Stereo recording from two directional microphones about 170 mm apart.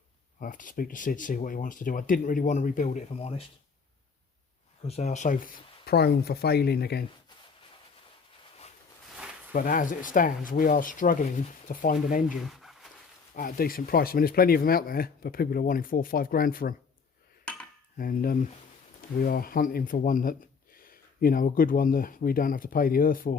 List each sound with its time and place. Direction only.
0.3 s speech: 50° left (ahead or behind)
3.2 s speech: 35° left (ahead or behind)
4.9 s speech: 40° left (ahead or behind); by 7.0 s 70° left (ahead or behind)
9.5 s speech: 55° left (ahead or behind)
12.5 s a sound: centre (ahead or behind)
13.3 s speech: 55° left (ahead or behind)
17.9 s speech: 55° left (ahead or behind)